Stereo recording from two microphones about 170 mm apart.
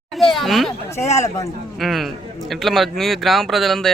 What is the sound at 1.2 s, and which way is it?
Speech, 20° left (ahead or behind).